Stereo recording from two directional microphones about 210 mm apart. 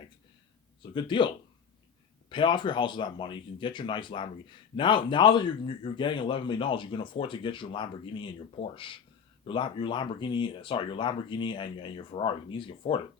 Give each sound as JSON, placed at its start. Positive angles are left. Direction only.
{"t": 0.8, "sound": "a man's voice", "side_deg": 20}
{"t": 2.3, "sound": "a man's voice", "side_deg": 20}